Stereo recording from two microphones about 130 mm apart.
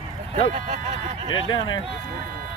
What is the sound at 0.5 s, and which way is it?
Speech, 70° right (ahead or behind).